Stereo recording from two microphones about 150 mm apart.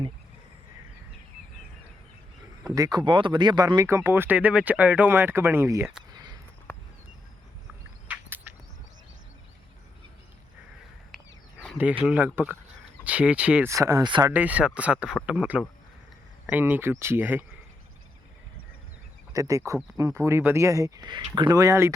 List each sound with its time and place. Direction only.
2.6 s speech: 25° right (ahead or behind)
6.7 s a sound: 10° left (ahead or behind)
8.0 s a sound: 10° right (ahead or behind)
11.8 s speech: 10° right (ahead or behind)
13.7 s speech: 20° right (ahead or behind)
14.3 s speech: 10° right (ahead or behind)
19.3 s speech: 20° right (ahead or behind)